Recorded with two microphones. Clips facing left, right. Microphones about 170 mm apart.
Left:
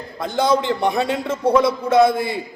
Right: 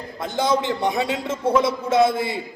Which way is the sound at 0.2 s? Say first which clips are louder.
Left 3 dB; 20° right (ahead or behind).